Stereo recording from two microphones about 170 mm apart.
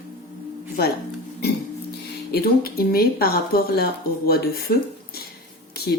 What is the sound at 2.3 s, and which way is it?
Speech, 65° left (ahead or behind).